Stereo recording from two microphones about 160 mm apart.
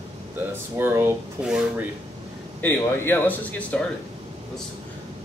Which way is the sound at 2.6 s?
15° left (ahead or behind).